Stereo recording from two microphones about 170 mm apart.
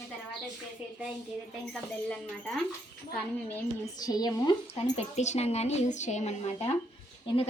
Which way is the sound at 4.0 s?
20° left (ahead or behind).